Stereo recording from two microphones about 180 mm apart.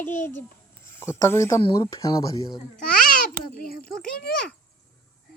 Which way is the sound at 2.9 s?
55° left (ahead or behind).